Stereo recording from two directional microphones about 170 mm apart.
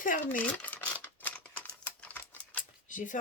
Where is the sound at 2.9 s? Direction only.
50° left (ahead or behind).